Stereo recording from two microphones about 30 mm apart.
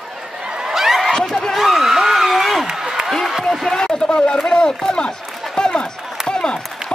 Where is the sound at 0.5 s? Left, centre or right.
Right.